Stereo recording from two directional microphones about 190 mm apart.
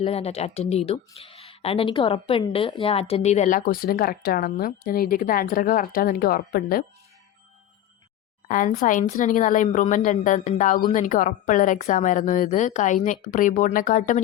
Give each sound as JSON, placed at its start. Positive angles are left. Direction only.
{"t": 0.0, "sound": "speech", "side_deg": 30}
{"t": 8.4, "sound": "speech", "side_deg": 45}